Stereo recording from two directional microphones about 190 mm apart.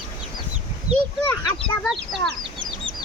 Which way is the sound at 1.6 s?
5° left (ahead or behind).